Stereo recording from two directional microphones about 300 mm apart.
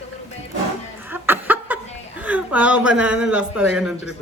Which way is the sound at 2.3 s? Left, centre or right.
Centre.